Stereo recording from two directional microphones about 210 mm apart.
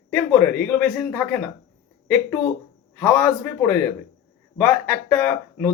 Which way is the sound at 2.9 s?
10° left (ahead or behind).